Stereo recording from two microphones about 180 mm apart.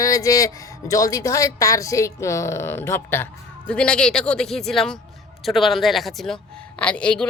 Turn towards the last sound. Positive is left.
turn(degrees=5)  # may be behind; listen again after turning